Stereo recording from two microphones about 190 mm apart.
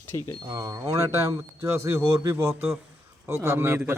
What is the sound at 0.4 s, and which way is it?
Speech, 20° right (ahead or behind).